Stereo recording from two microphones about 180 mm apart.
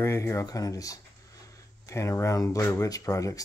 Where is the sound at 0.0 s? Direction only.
15° left (ahead or behind).